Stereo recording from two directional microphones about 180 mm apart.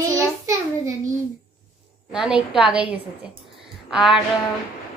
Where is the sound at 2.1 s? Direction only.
Centre (ahead or behind).